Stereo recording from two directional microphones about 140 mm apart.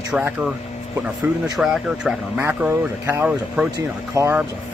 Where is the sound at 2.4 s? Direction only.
15° right (ahead or behind).